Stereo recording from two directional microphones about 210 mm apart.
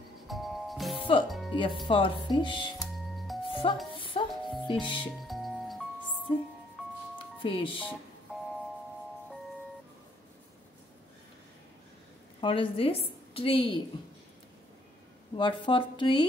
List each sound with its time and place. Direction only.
0.3 s music: centre (ahead or behind)
0.9 s music: 25° left (ahead or behind)
1.5 s speech: 25° left (ahead or behind)
2.9 s music: centre (ahead or behind)
3.4 s music: 25° left (ahead or behind)
4.3 s music: centre (ahead or behind)
4.6 s speech: 25° left (ahead or behind)
5.0 s music: centre (ahead or behind)
7.3 s speech: 25° left (ahead or behind)
8.3 s doorbell: 5° right (ahead or behind)
12.4 s a woman's voice: 25° left (ahead or behind)
15.3 s speech: 20° left (ahead or behind)